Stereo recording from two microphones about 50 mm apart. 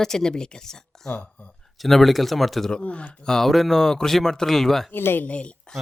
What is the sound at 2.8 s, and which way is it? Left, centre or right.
Speech, left.